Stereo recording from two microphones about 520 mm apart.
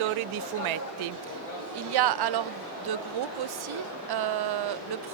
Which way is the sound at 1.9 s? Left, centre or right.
Right.